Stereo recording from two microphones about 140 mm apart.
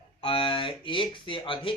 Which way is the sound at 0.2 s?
40° left (ahead or behind).